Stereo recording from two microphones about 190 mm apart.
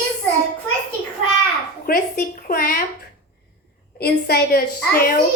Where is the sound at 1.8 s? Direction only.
50° left (ahead or behind).